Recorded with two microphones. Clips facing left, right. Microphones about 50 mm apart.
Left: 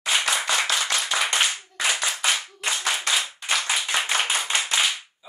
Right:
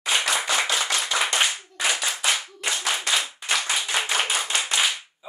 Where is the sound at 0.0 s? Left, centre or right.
Centre.